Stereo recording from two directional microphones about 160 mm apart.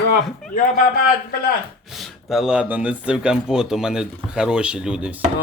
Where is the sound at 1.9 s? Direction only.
Centre (ahead or behind).